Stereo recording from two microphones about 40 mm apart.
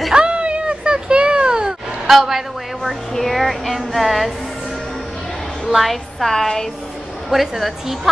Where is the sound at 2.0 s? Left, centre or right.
Centre.